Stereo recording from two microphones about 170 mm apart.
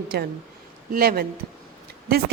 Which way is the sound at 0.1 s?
70° right (ahead or behind).